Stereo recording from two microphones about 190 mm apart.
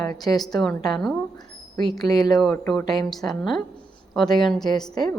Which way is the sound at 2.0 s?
20° left (ahead or behind).